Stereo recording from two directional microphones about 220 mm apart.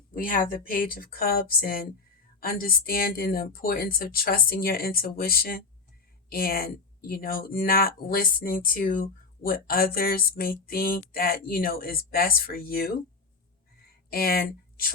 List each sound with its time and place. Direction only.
0.1 s speech: 40° left (ahead or behind)
14.1 s speech: 45° left (ahead or behind)